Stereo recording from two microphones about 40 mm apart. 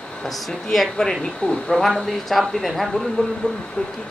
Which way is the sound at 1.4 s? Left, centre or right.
Left.